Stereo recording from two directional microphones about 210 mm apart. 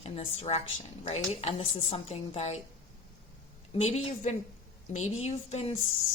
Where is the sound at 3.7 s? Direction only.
30° left (ahead or behind).